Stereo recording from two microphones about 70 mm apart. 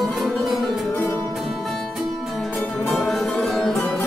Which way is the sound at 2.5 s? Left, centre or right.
Left.